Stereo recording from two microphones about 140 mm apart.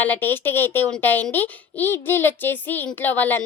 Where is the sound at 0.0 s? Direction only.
15° left (ahead or behind).